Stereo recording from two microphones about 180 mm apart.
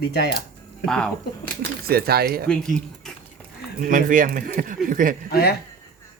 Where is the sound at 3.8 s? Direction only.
50° right (ahead or behind).